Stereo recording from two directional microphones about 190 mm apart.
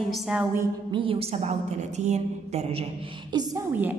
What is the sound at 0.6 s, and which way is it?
A woman's voice, 25° right (ahead or behind).